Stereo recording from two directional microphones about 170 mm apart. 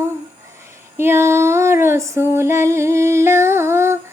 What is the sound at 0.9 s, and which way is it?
Female singing, 15° right (ahead or behind).